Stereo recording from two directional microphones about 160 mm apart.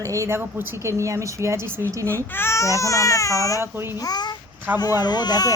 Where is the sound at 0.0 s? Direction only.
20° right (ahead or behind).